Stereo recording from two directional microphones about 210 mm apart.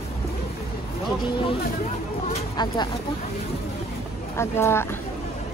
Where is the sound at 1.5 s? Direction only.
30° left (ahead or behind).